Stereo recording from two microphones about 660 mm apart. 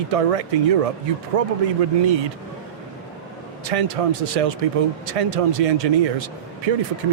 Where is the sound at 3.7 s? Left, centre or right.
Right.